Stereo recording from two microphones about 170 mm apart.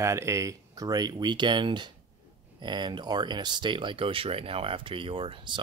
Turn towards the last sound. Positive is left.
turn(degrees=-30)  # may be behind; listen again after turning